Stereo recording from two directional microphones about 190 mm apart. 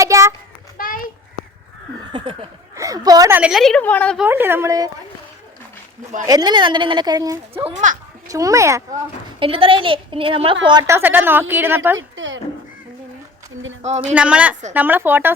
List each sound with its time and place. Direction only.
0.0 s child singing: 15° right (ahead or behind)
0.8 s a sound: 45° left (ahead or behind)
2.1 s a woman's voice: 30° right (ahead or behind); by 4.2 s 5° left (ahead or behind)
4.2 s a woman's voice: 10° right (ahead or behind)
6.2 s a woman's voice: 20° right (ahead or behind)
7.8 s a child's voice: 40° right (ahead or behind)
8.3 s a woman's voice: 15° right (ahead or behind)
9.4 s a woman's voice: 25° right (ahead or behind); by 11.9 s 10° right (ahead or behind)
11.9 s speech: 80° right
14.1 s a woman's voice: 5° right (ahead or behind)